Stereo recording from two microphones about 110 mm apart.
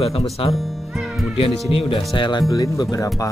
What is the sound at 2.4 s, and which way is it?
Speech, 30° left (ahead or behind).